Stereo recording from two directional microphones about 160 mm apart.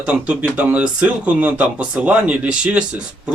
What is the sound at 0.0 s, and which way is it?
Speech, 5° right (ahead or behind).